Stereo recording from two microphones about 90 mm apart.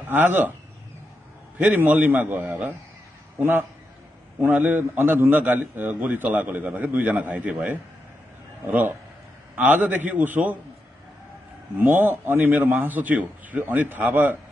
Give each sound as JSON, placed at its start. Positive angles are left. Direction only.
{"t": 0.1, "sound": "a man's voice", "side_deg": -20}
{"t": 1.6, "sound": "a man's voice", "side_deg": -20}
{"t": 4.4, "sound": "a man's voice", "side_deg": -20}
{"t": 11.8, "sound": "a man's voice", "side_deg": -20}